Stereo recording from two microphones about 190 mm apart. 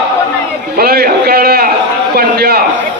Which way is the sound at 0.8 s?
55° right (ahead or behind).